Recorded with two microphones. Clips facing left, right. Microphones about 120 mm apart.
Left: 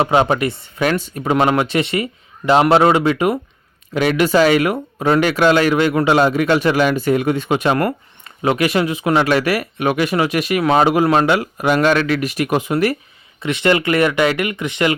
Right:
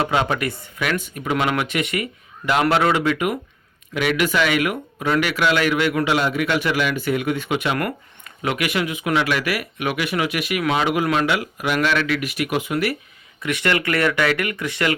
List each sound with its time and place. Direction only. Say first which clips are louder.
0.0 s speech: left 6 dB; 25° left (ahead or behind)
13.4 s speech: left 5 dB; 25° left (ahead or behind)